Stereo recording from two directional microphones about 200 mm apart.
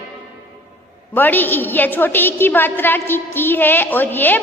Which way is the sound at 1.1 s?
10° left (ahead or behind).